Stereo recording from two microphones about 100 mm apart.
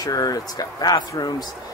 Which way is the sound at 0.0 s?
40° left (ahead or behind).